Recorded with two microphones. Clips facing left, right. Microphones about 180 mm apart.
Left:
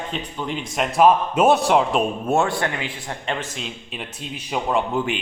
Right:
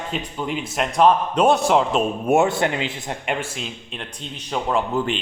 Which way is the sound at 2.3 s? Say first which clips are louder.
Right 5 dB; 20° right (ahead or behind).